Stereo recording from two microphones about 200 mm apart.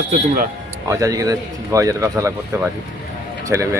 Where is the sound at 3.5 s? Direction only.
15° right (ahead or behind).